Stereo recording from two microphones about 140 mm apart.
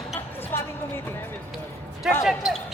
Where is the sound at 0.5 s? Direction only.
15° left (ahead or behind).